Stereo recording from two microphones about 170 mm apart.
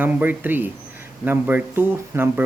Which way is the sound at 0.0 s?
10° right (ahead or behind).